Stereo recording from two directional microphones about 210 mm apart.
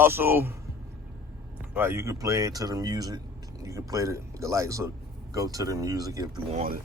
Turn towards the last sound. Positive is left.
turn(degrees=-40)  # may be behind; listen again after turning